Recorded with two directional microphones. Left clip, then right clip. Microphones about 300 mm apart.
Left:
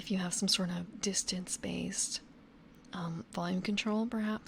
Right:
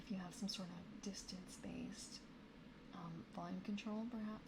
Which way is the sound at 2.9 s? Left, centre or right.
Left.